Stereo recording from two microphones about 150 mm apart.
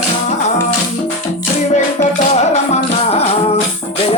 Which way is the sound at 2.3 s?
45° left (ahead or behind).